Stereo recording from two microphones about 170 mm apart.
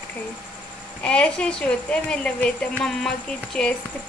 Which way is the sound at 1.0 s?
5° left (ahead or behind).